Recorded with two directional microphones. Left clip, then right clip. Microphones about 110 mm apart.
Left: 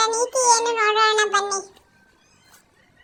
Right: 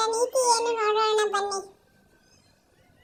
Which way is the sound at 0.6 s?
15° right (ahead or behind).